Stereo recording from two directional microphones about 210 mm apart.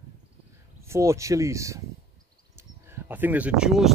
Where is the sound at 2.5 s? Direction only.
10° right (ahead or behind).